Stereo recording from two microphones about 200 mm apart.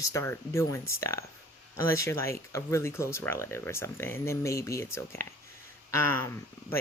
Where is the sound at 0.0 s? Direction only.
15° left (ahead or behind).